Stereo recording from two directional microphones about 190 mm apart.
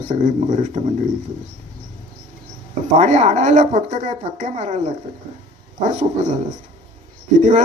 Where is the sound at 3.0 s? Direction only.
40° right (ahead or behind).